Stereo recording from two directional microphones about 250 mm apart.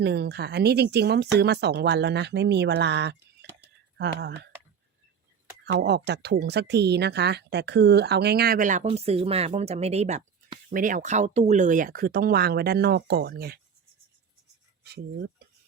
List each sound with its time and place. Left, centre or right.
0.0 s speech: right
3.4 s whispering: right
3.9 s speech: right
5.6 s speech: right
14.8 s speech: right